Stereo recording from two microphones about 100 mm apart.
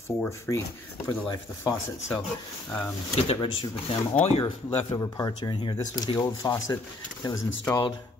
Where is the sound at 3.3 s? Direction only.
60° left (ahead or behind).